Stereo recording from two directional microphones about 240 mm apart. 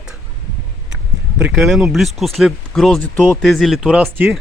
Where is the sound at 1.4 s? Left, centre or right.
Centre.